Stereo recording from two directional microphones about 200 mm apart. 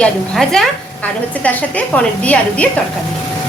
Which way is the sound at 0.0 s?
Centre (ahead or behind).